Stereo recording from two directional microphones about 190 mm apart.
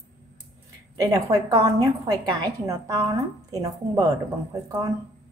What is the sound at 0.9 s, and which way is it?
A woman's voice, 20° right (ahead or behind).